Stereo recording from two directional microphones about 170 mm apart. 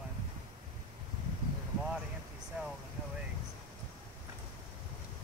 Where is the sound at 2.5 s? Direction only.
10° right (ahead or behind).